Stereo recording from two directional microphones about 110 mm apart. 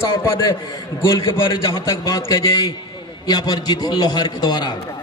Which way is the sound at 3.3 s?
40° left (ahead or behind).